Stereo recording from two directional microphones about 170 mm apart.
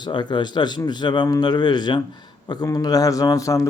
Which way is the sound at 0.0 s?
25° left (ahead or behind).